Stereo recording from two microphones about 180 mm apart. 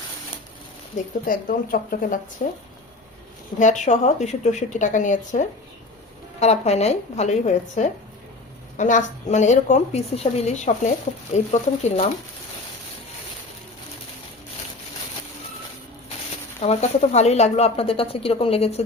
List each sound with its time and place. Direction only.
0.9 s speech: 50° left (ahead or behind)
3.6 s speech: 40° left (ahead or behind)
16.6 s speech: 35° left (ahead or behind)